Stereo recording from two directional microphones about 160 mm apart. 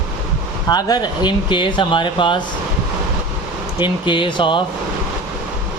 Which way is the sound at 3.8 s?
30° left (ahead or behind).